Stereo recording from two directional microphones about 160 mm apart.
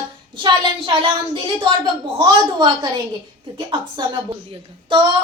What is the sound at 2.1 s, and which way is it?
A woman's voice, 30° right (ahead or behind).